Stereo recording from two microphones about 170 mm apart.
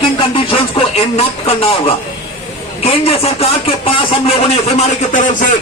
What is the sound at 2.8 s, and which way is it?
Speech, 35° left (ahead or behind).